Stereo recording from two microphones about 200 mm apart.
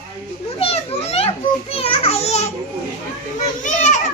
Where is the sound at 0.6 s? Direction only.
30° left (ahead or behind).